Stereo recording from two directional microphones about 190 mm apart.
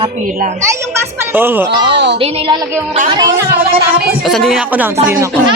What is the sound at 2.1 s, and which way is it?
A woman's voice, 30° right (ahead or behind).